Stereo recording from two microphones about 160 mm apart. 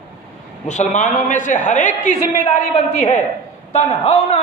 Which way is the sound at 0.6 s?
50° left (ahead or behind).